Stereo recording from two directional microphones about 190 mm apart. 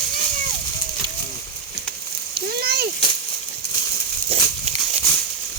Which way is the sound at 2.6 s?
55° right (ahead or behind).